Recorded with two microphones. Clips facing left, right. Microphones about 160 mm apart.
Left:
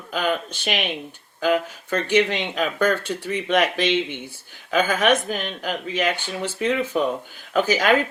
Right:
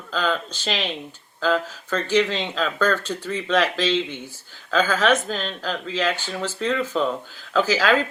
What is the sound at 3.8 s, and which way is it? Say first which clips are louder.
Speech: left 1 dB; 60° left (ahead or behind).